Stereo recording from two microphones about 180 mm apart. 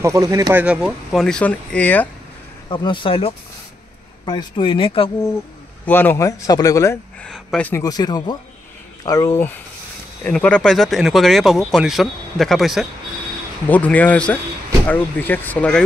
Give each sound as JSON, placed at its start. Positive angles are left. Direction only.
{"t": 0.0, "sound": "speech", "side_deg": -20}
{"t": 2.7, "sound": "speech", "side_deg": 25}
{"t": 5.9, "sound": "speech", "side_deg": 10}
{"t": 7.2, "sound": "speech", "side_deg": 5}
{"t": 7.8, "sound": "speech", "side_deg": 20}